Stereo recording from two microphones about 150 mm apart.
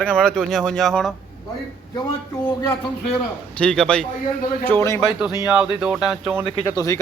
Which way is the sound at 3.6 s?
5° left (ahead or behind).